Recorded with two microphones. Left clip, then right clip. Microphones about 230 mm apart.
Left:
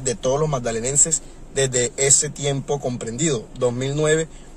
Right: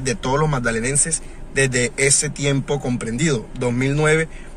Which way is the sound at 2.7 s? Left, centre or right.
Right.